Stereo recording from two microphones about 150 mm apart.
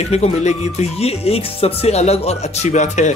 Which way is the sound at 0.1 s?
45° left (ahead or behind).